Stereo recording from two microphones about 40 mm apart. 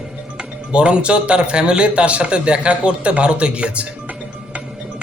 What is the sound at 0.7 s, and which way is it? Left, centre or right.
A man's voice, right.